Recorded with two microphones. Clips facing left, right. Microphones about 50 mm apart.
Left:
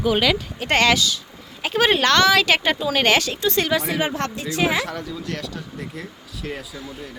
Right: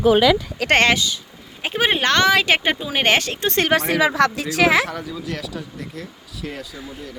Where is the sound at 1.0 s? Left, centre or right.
Right.